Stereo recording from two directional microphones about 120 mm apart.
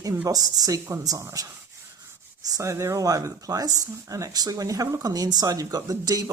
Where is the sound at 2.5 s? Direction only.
25° right (ahead or behind).